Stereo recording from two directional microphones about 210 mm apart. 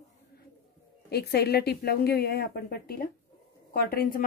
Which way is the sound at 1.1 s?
50° left (ahead or behind).